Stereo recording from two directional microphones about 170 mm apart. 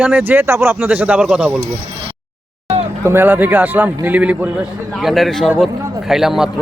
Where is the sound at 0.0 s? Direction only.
10° right (ahead or behind).